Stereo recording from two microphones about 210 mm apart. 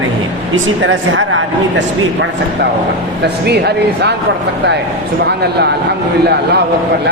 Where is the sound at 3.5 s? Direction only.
50° right (ahead or behind).